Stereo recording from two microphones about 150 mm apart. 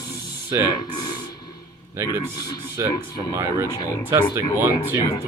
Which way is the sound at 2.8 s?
20° right (ahead or behind).